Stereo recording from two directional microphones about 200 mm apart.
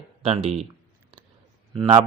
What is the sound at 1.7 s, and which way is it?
Speech, 30° right (ahead or behind).